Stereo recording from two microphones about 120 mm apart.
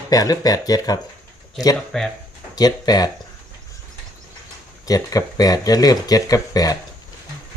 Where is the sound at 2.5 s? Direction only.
35° left (ahead or behind).